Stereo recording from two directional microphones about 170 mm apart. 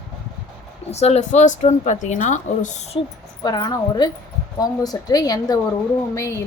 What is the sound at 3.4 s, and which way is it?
A woman's voice, 25° left (ahead or behind).